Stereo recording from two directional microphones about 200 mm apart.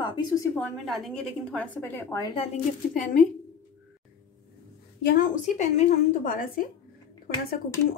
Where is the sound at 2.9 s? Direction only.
40° left (ahead or behind).